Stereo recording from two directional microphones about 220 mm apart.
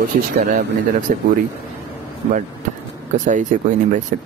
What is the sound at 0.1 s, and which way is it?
Speech, 40° right (ahead or behind).